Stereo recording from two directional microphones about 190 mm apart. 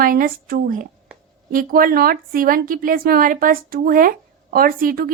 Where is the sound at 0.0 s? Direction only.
45° right (ahead or behind).